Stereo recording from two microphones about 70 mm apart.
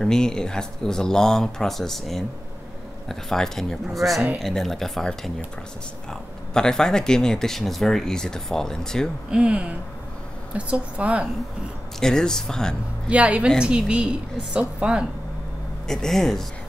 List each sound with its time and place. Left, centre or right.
0.0 s speech: centre
9.3 s a woman's voice: centre
12.0 s speech: centre
13.1 s a woman's voice: centre
15.9 s speech: centre